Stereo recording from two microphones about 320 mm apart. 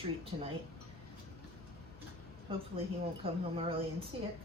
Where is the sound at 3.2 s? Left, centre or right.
Centre.